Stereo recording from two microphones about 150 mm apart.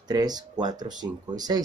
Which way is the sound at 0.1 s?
25° right (ahead or behind).